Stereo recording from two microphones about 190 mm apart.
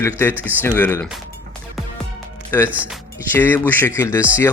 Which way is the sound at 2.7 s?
5° right (ahead or behind).